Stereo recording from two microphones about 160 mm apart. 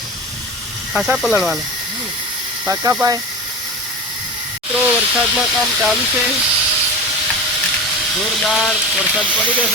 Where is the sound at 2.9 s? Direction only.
20° right (ahead or behind).